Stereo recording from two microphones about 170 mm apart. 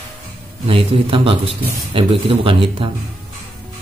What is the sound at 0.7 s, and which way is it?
A man's voice, 30° right (ahead or behind).